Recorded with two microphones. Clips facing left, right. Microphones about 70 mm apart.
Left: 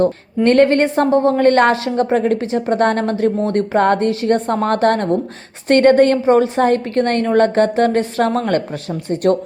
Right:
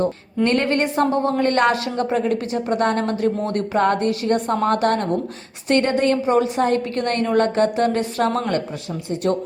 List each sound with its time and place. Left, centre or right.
0.4 s a woman's voice: left
6.2 s a woman's voice: left